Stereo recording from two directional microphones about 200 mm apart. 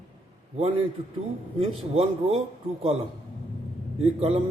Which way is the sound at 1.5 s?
30° right (ahead or behind).